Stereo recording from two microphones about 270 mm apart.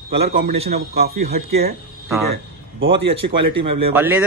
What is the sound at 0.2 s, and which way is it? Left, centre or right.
A man's voice, right.